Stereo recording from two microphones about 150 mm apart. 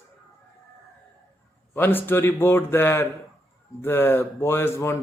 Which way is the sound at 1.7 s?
15° left (ahead or behind).